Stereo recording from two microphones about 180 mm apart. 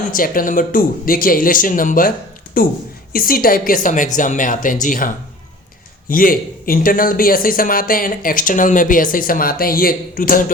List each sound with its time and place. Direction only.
0.0 s a man's voice: 50° left (ahead or behind)